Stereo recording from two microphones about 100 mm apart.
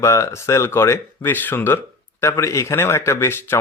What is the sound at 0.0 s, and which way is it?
Speech, 30° left (ahead or behind).